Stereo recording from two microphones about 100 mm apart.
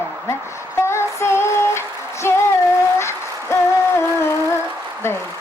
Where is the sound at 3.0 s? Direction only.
25° left (ahead or behind).